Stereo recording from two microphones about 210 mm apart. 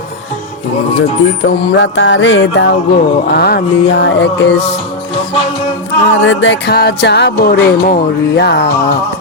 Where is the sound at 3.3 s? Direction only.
50° left (ahead or behind).